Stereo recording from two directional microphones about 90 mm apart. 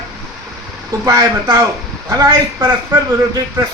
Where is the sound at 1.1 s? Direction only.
35° right (ahead or behind).